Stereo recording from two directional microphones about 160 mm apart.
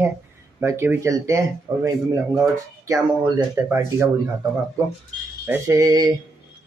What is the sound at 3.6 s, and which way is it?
Speech, 20° right (ahead or behind).